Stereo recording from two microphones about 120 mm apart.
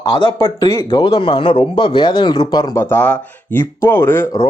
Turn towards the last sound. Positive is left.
turn(degrees=20)  # may be behind; listen again after turning